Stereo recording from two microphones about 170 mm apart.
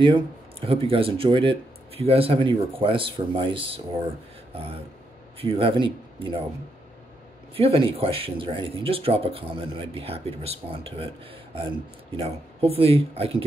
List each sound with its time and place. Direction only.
0.0 s speech: 30° right (ahead or behind)
5.4 s speech: 30° right (ahead or behind)
7.5 s speech: 30° right (ahead or behind)
12.2 s speech: 35° right (ahead or behind)